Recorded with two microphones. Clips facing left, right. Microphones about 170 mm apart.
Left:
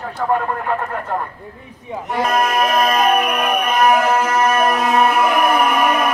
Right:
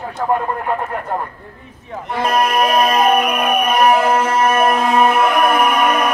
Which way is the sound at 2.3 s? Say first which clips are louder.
Right 2 dB; 30° right (ahead or behind).